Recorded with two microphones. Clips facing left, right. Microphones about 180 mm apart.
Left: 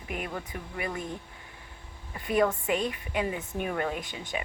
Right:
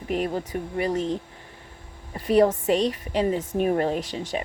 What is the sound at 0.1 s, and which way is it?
Speech, 35° right (ahead or behind).